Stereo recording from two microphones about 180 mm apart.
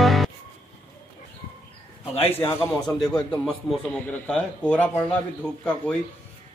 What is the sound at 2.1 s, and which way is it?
Speech, 35° left (ahead or behind).